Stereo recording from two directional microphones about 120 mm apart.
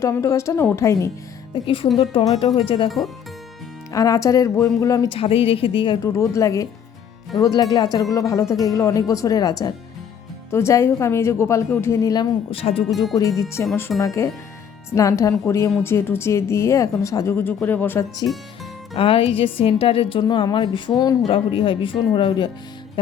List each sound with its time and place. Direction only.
0.0 s speech: 25° left (ahead or behind)
1.6 s a woman's voice: 45° left (ahead or behind)
3.9 s speech: 30° left (ahead or behind)
5.0 s a woman's voice: 50° left (ahead or behind)
6.0 s speech: 25° left (ahead or behind)
12.5 s a woman's voice: 50° left (ahead or behind)
13.1 s speech: 25° left (ahead or behind)
18.9 s a woman's voice: 50° left (ahead or behind)
21.2 s a woman's voice: 50° left (ahead or behind)